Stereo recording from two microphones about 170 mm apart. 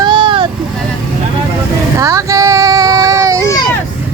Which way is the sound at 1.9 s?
20° right (ahead or behind).